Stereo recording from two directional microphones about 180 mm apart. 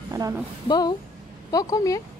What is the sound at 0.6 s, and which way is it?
Speech, 25° left (ahead or behind).